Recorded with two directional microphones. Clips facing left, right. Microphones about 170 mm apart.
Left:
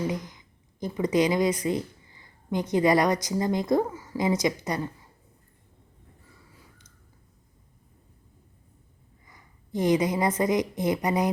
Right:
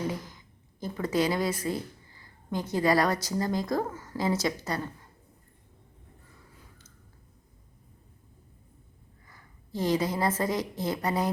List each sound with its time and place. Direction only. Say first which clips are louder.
0.1 s a woman's voice: left 4 dB; 15° left (ahead or behind)
9.3 s a woman's voice: left 5 dB; 15° left (ahead or behind)